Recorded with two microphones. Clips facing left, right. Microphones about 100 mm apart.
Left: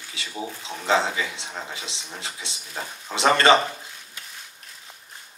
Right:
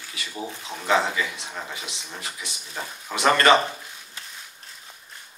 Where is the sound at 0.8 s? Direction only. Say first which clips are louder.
Even; 25° left (ahead or behind).